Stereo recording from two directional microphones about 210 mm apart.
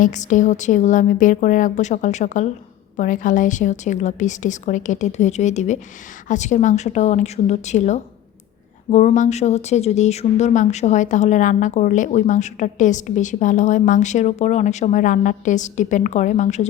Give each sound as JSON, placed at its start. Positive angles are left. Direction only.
{"t": 0.0, "sound": "speech", "side_deg": 35}